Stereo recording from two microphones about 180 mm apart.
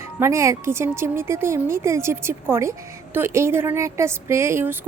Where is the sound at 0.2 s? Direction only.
15° right (ahead or behind).